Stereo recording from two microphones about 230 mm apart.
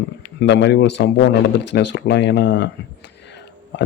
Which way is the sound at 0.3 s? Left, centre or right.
Left.